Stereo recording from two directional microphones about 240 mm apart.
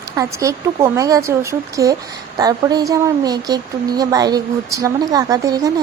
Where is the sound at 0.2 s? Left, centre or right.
Centre.